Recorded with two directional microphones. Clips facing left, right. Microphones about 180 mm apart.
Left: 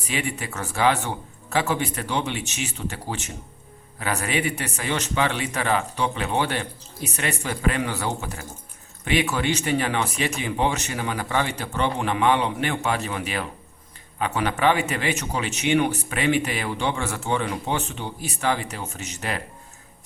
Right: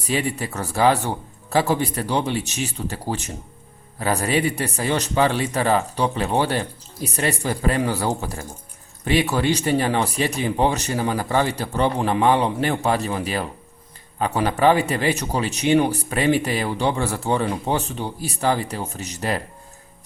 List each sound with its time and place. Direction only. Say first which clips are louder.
0.1 s speech: right 5 dB; 35° right (ahead or behind)